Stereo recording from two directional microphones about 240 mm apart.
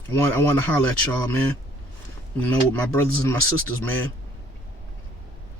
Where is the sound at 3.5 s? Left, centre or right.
Right.